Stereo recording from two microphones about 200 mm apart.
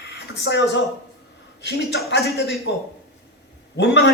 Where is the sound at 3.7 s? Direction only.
60° left (ahead or behind).